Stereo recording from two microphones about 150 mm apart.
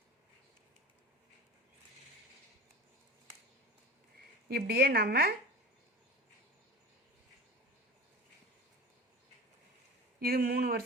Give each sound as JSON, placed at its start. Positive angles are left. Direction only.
{"t": 4.2, "sound": "speech", "side_deg": -90}
{"t": 10.2, "sound": "speech", "side_deg": -80}